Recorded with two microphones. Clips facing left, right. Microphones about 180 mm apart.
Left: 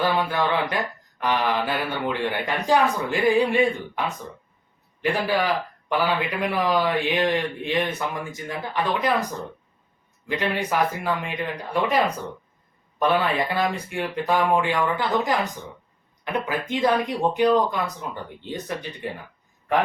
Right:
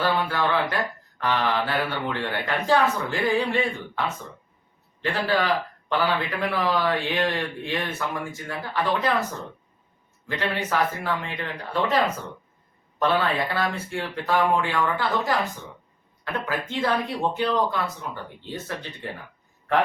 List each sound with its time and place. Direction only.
0.0 s a man's voice: 15° left (ahead or behind)
10.2 s a man's voice: 15° left (ahead or behind)
13.0 s a man's voice: 15° left (ahead or behind)